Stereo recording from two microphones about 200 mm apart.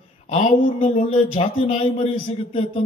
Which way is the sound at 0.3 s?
30° left (ahead or behind).